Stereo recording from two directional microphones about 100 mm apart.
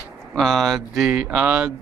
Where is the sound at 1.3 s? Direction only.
15° right (ahead or behind).